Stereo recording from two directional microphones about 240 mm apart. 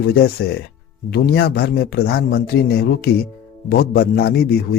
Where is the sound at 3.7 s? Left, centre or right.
Left.